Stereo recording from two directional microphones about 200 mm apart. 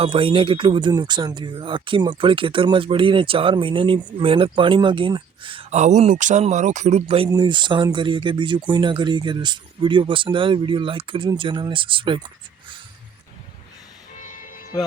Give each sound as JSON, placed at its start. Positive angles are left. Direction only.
{"t": 0.0, "sound": "speech", "side_deg": -25}
{"t": 14.2, "sound": "music", "side_deg": 40}